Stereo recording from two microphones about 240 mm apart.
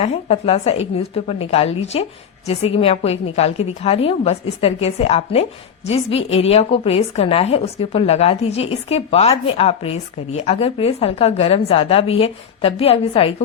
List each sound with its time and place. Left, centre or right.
0.0 s a woman's voice: left